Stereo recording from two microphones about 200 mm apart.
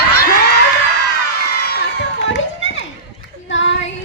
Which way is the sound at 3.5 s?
65° left (ahead or behind).